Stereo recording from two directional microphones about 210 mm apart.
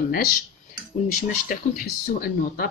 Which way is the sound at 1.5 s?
45° left (ahead or behind).